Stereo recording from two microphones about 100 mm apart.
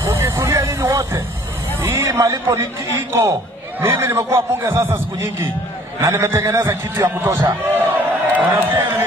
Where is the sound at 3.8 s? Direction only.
20° right (ahead or behind).